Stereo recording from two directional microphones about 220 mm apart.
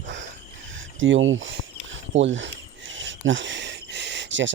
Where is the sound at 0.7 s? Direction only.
60° right (ahead or behind).